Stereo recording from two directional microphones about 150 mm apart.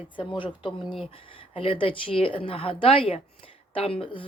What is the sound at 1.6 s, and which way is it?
Speech, 40° left (ahead or behind).